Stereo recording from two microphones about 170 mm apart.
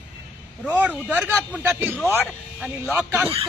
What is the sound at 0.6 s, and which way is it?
A man's voice, 10° right (ahead or behind).